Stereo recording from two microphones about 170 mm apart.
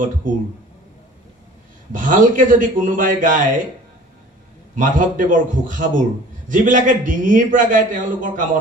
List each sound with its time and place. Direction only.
0.3 s a man's voice: 50° right (ahead or behind)
1.9 s a man's voice: 50° right (ahead or behind)
4.7 s a man's voice: 50° right (ahead or behind)